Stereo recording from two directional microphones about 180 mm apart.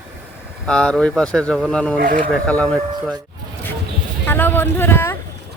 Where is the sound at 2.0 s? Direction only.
45° right (ahead or behind).